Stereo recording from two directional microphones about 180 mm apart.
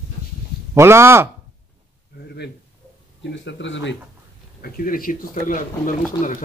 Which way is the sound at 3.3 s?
85° left.